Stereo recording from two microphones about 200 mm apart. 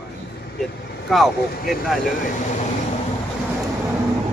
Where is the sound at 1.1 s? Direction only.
Centre (ahead or behind).